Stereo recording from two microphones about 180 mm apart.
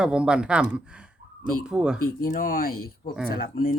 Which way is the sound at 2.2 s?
50° left (ahead or behind).